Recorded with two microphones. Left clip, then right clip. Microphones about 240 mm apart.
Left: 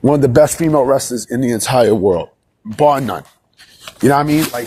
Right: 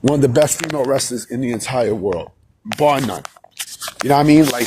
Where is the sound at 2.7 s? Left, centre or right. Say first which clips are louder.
Left 3 dB; centre.